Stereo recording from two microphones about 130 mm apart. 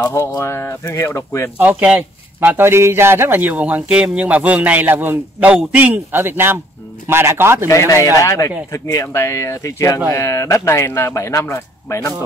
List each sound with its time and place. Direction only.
0.0 s speech: 25° left (ahead or behind)
1.6 s a man's voice: 10° right (ahead or behind)
7.6 s speech: 25° left (ahead or behind)